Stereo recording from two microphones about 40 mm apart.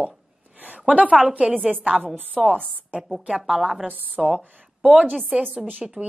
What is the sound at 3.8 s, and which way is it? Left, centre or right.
Speech, right.